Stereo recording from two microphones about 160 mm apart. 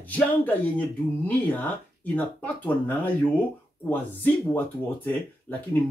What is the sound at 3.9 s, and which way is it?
Speech, 10° left (ahead or behind).